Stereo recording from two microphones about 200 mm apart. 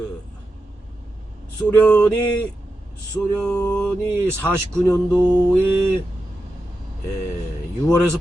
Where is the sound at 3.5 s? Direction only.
10° left (ahead or behind).